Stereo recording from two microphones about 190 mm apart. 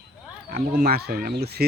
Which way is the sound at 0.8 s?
55° right (ahead or behind).